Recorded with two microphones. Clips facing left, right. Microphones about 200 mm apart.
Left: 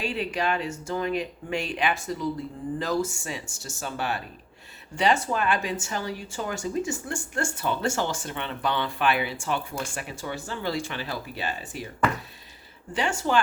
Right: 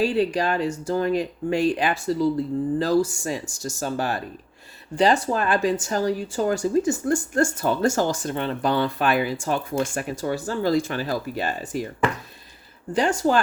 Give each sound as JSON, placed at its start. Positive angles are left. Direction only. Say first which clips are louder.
{"t": 0.0, "sound": "speech", "louder": "right 7 dB", "side_deg": -35}
{"t": 12.9, "sound": "speech", "louder": "right 5 dB", "side_deg": -40}